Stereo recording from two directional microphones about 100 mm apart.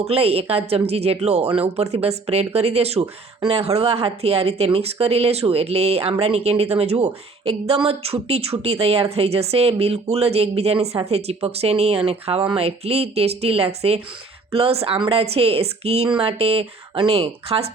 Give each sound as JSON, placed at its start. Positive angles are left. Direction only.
{"t": 0.0, "sound": "a woman's voice", "side_deg": -90}